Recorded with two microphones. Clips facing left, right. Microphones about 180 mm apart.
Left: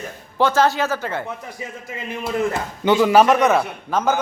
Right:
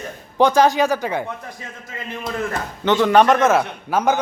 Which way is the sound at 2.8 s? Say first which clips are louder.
Even; 10° left (ahead or behind).